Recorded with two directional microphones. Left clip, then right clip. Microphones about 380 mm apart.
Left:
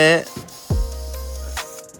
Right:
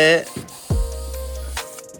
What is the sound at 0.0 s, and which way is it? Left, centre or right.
Music, centre.